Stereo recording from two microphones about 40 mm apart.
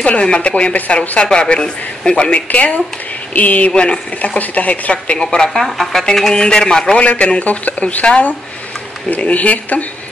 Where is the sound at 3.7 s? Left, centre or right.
Left.